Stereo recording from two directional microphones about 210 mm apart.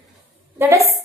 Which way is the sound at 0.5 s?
10° right (ahead or behind).